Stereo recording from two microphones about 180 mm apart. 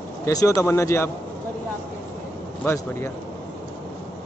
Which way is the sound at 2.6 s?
15° left (ahead or behind).